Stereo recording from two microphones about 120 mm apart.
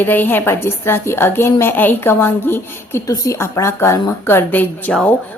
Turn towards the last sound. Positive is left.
turn(degrees=15)  # may be behind; listen again after turning